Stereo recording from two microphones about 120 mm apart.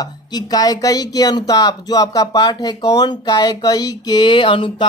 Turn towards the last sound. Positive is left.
turn(degrees=45)  # may be behind; listen again after turning